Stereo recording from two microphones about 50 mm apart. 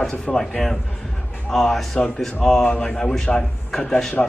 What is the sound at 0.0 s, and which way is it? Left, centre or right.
A man's voice, centre.